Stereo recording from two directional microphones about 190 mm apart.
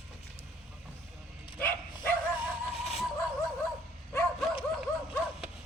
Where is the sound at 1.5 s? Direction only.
10° left (ahead or behind).